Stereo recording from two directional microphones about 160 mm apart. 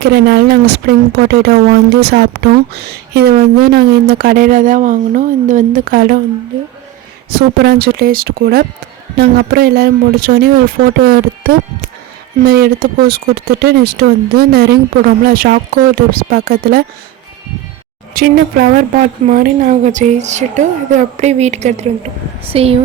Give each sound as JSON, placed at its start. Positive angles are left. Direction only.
{"t": 0.0, "sound": "a woman's voice", "side_deg": -90}
{"t": 7.3, "sound": "a woman's voice", "side_deg": -75}
{"t": 18.1, "sound": "speech", "side_deg": -70}
{"t": 19.2, "sound": "a woman's voice", "side_deg": -55}